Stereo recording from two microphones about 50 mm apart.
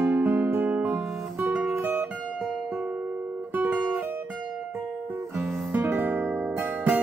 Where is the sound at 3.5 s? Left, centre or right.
Right.